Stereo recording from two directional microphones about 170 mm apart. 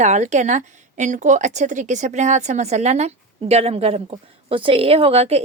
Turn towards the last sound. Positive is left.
turn(degrees=-35)  # may be behind; listen again after turning